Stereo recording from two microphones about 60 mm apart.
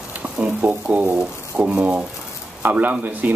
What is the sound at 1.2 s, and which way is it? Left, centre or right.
Speech, centre.